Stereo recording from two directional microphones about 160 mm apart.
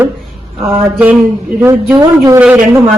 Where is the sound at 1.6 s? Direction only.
15° right (ahead or behind).